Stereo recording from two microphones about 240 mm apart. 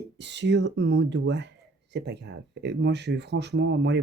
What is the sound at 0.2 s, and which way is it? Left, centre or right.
Speech, right.